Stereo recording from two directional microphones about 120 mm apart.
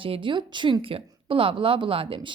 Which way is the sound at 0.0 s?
45° right (ahead or behind).